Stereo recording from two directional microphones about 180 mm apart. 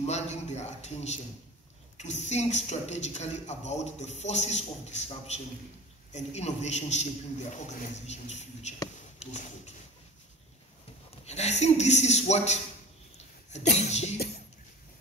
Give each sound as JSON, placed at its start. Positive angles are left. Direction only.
{"t": 0.0, "sound": "a man's voice", "side_deg": 40}
{"t": 9.2, "sound": "a sound", "side_deg": 40}
{"t": 11.2, "sound": "a man's voice", "side_deg": 40}